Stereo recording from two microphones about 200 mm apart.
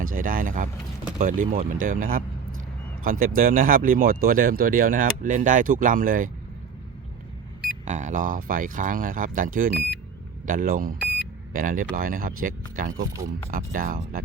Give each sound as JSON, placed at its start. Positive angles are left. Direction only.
{"t": 0.0, "sound": "speech", "side_deg": -45}
{"t": 7.9, "sound": "speech", "side_deg": -40}